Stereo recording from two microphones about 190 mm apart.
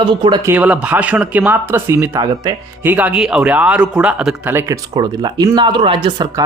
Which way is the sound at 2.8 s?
10° right (ahead or behind).